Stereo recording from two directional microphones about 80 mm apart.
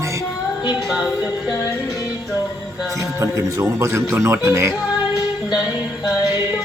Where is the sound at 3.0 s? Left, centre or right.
Right.